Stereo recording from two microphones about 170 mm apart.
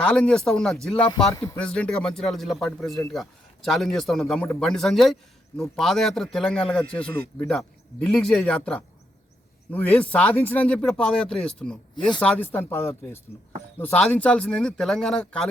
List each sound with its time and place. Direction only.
0.0 s speech: 5° left (ahead or behind)
1.3 s speech: 20° left (ahead or behind)
1.5 s speech: 5° left (ahead or behind)